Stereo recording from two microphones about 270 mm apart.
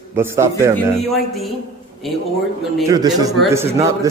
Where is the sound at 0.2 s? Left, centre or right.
Centre.